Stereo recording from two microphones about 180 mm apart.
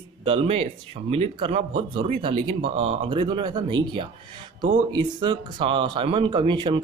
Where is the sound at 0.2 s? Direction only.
30° right (ahead or behind).